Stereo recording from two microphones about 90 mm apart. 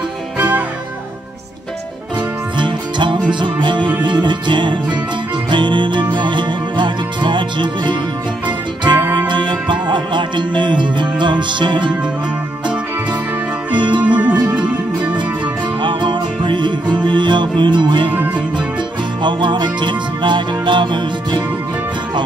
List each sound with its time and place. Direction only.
0.4 s music: 20° right (ahead or behind)
2.5 s music: 60° right (ahead or behind)
13.7 s music: 60° right (ahead or behind)
14.0 s music: 15° right (ahead or behind)
15.8 s music: 65° right (ahead or behind)
18.1 s music: 20° right (ahead or behind)
19.2 s music: 60° right (ahead or behind)